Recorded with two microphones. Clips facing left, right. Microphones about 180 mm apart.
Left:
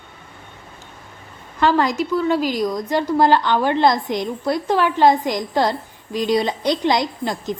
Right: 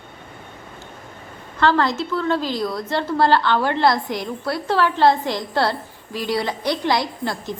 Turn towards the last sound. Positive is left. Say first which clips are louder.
# left 2 dB
turn(degrees=20)  # may be behind; listen again after turning